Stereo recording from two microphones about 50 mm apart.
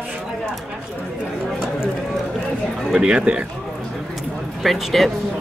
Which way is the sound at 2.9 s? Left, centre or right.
Centre.